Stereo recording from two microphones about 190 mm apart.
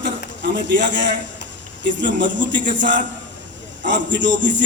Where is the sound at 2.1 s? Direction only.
70° right (ahead or behind).